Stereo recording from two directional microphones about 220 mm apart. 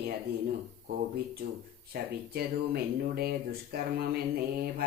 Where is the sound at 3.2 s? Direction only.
45° right (ahead or behind).